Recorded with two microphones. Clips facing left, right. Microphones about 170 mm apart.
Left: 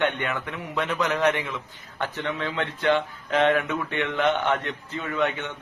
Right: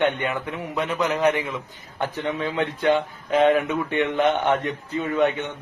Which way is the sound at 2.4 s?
15° right (ahead or behind).